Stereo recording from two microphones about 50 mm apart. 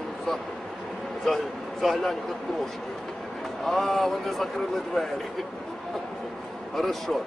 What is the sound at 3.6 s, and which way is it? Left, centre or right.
A man's voice, centre.